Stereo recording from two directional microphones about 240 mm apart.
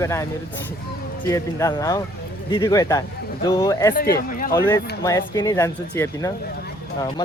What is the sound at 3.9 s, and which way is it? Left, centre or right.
Speech, left.